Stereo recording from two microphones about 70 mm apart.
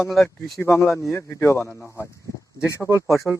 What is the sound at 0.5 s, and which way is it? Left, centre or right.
A man's voice, left.